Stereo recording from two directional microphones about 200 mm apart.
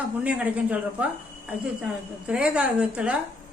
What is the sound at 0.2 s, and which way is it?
Speech, 5° right (ahead or behind).